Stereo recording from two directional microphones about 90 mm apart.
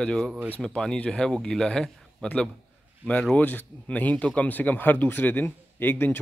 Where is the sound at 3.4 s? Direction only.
20° left (ahead or behind).